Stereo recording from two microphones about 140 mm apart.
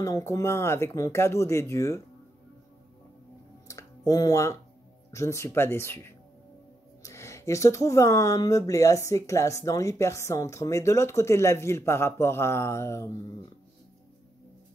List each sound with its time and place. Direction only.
0.0 s speech: 20° left (ahead or behind)
3.6 s a sound: 25° left (ahead or behind)
5.1 s speech: 20° left (ahead or behind)